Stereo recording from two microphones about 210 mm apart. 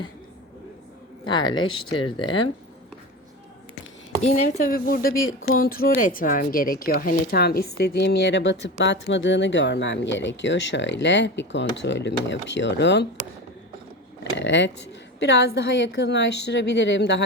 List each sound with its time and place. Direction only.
1.2 s speech: 20° left (ahead or behind)
4.2 s speech: 30° left (ahead or behind); by 13.1 s 55° left (ahead or behind)
14.3 s speech: 60° left (ahead or behind)